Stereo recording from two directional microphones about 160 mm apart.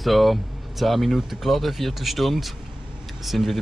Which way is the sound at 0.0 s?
Centre (ahead or behind).